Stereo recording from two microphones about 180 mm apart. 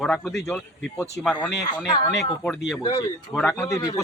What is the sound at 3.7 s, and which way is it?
Speech, 20° left (ahead or behind).